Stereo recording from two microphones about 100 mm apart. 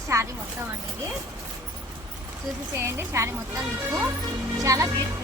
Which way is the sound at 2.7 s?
25° right (ahead or behind).